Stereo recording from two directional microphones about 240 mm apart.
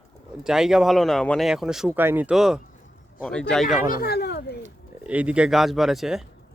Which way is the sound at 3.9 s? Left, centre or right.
Left.